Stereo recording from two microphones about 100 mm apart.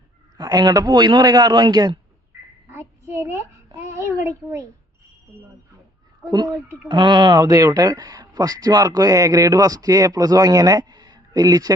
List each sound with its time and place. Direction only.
0.3 s speech: 40° right (ahead or behind)
2.6 s a child's voice: 25° right (ahead or behind)
6.8 s speech: 50° right (ahead or behind)